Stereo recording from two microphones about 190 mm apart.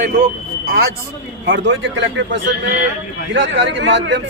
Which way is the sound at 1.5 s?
75° right (ahead or behind).